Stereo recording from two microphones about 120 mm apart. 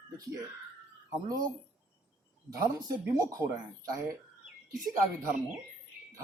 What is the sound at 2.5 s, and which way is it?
Speech, 30° right (ahead or behind).